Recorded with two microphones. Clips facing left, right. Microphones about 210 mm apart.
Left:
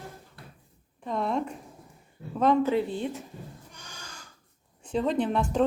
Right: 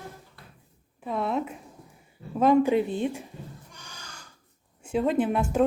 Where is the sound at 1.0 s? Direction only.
5° right (ahead or behind).